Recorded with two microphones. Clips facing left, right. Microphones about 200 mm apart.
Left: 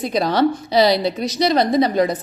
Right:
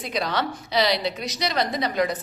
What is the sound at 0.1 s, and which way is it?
A woman's voice, 35° left (ahead or behind).